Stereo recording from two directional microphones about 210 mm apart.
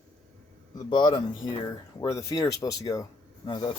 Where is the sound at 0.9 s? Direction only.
20° left (ahead or behind).